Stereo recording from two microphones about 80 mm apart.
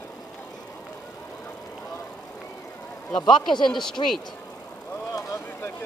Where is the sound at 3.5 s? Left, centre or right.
Left.